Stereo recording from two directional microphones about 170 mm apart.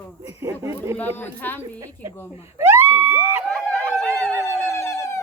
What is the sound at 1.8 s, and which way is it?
Speech, 20° right (ahead or behind).